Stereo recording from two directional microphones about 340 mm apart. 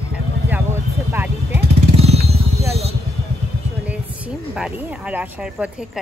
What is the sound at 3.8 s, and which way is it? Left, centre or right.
Speech, centre.